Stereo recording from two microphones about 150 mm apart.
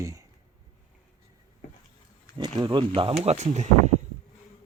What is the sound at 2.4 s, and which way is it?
Speech, 30° right (ahead or behind).